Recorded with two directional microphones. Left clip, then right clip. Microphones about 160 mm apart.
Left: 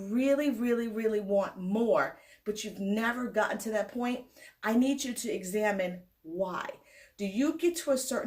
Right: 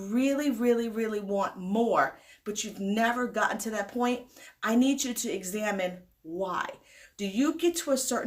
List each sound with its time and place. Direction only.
0.1 s speech: 25° right (ahead or behind)